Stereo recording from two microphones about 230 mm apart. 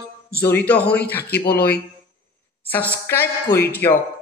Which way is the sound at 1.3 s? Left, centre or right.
Left.